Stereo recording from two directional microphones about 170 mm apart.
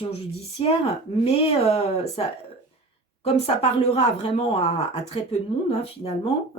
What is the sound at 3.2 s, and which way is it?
Speech, 35° left (ahead or behind).